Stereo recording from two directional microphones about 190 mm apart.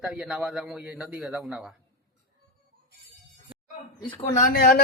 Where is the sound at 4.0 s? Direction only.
25° left (ahead or behind).